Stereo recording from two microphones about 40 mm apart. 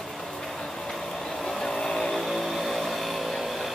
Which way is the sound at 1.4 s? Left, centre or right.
Centre.